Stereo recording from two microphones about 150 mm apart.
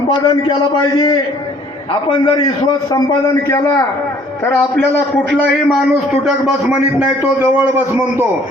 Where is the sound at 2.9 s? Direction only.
25° left (ahead or behind).